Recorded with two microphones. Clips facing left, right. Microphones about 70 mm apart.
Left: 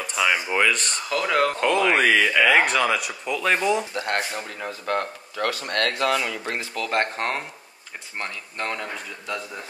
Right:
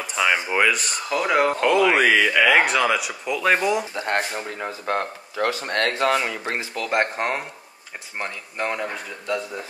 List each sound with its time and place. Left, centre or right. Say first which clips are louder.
0.0 s speech: right 1 dB; centre
1.6 s speech: right 2 dB; centre
4.0 s speech: right 2 dB; right
6.6 s speech: right 2 dB; centre